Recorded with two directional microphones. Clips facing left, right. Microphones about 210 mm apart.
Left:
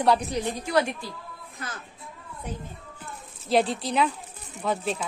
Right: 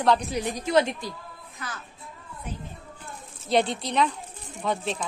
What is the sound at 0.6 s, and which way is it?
Speech, 20° right (ahead or behind).